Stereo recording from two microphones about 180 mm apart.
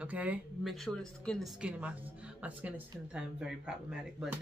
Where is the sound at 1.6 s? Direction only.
5° right (ahead or behind).